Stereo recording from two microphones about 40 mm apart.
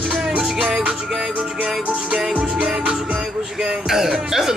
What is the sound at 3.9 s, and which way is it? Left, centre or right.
Speech, centre.